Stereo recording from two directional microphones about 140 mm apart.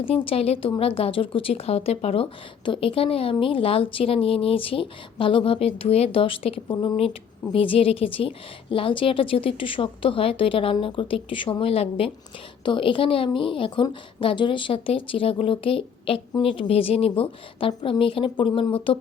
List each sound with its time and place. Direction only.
0.0 s a woman's voice: 40° left (ahead or behind)